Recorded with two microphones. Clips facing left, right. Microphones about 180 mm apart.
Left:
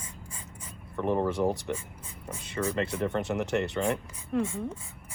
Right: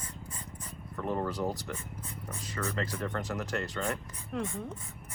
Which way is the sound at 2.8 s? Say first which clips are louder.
Left 6 dB; 25° left (ahead or behind).